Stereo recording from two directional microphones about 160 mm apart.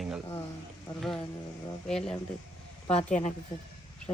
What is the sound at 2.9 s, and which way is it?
Speech, 45° left (ahead or behind).